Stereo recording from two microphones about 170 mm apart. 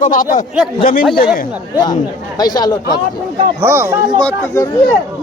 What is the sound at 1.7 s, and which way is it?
Speech, 25° left (ahead or behind).